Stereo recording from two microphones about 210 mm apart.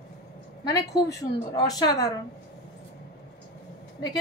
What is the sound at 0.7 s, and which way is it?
A woman's voice, 15° left (ahead or behind).